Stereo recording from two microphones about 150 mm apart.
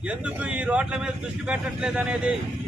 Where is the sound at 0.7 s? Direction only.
5° right (ahead or behind).